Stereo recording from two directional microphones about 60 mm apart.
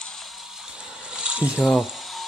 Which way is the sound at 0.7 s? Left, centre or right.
Centre.